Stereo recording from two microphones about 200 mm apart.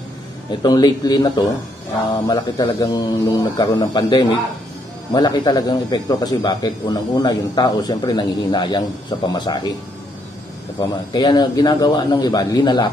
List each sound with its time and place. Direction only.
0.5 s speech: 20° left (ahead or behind)
10.8 s speech: 20° left (ahead or behind)